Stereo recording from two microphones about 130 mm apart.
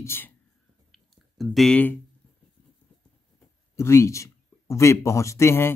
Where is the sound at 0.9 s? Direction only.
Centre (ahead or behind).